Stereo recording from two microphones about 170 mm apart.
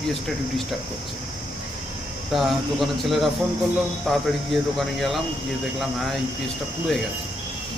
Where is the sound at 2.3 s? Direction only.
Centre (ahead or behind).